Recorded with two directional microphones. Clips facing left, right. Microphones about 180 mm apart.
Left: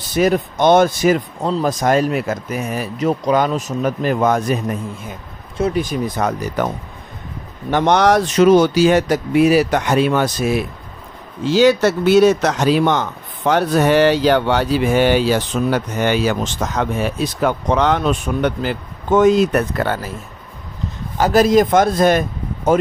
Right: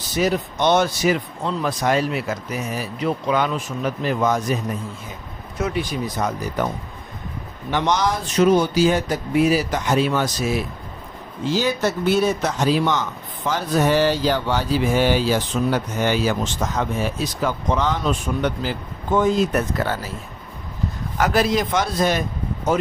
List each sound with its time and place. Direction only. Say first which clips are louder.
0.1 s speech: left 5 dB; 55° left (ahead or behind)
5.6 s speech: left 5 dB; 45° left (ahead or behind); by 6.7 s 60° left (ahead or behind)
7.7 s a man's voice: left 7 dB; 60° left (ahead or behind)
11.4 s a man's voice: left 8 dB; 80° left; by 20.1 s 60° left (ahead or behind)
21.2 s speech: left 7 dB; 40° left (ahead or behind)